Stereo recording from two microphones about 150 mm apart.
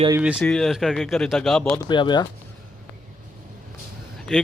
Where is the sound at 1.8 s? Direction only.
30° left (ahead or behind).